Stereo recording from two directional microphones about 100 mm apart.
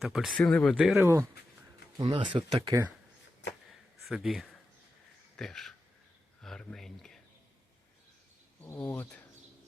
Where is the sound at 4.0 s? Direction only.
5° right (ahead or behind).